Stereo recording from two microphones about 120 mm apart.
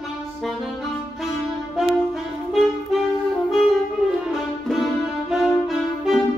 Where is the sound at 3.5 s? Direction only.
Centre (ahead or behind).